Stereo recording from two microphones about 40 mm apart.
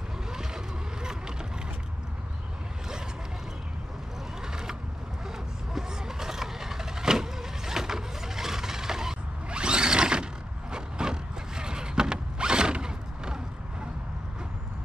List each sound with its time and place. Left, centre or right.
4.4 s vehicle: centre
9.5 s mechanisms: right
10.7 s a sound: centre